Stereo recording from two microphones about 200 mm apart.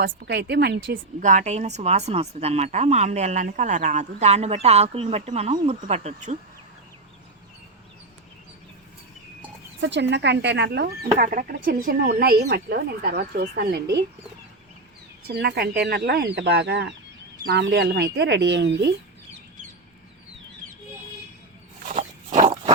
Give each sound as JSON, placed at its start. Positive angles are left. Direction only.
{"t": 0.0, "sound": "speech", "side_deg": -50}
{"t": 1.2, "sound": "speech", "side_deg": -40}
{"t": 9.8, "sound": "speech", "side_deg": -60}
{"t": 15.3, "sound": "speech", "side_deg": -55}
{"t": 21.8, "sound": "pig", "side_deg": -35}